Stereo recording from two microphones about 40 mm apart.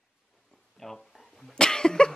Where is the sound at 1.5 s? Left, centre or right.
Centre.